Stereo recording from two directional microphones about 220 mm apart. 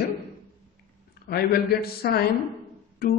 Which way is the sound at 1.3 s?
45° left (ahead or behind).